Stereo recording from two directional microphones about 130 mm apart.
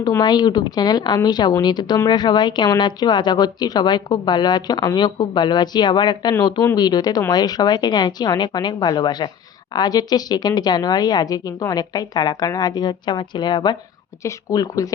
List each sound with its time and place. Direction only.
0.0 s a woman's voice: 30° left (ahead or behind)